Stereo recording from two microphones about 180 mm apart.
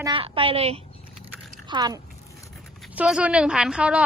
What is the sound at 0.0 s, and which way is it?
A woman's voice, 30° right (ahead or behind).